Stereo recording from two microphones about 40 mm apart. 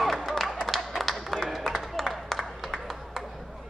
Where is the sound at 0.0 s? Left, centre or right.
Centre.